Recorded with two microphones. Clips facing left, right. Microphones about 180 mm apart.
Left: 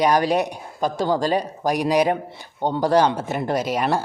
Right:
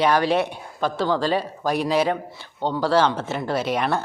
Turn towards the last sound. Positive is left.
turn(degrees=10)  # may be behind; listen again after turning